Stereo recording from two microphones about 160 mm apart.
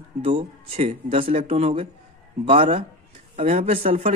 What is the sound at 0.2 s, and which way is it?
Speech, 35° right (ahead or behind).